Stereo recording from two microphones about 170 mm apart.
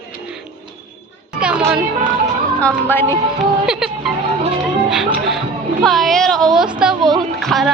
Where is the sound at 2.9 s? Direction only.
15° left (ahead or behind).